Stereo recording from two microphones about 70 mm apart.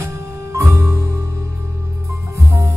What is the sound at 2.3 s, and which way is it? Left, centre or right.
Music, right.